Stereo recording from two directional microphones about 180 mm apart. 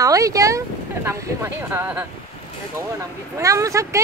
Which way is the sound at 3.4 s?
15° right (ahead or behind).